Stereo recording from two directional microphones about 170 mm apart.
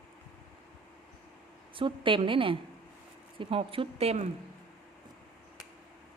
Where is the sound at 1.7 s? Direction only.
30° right (ahead or behind).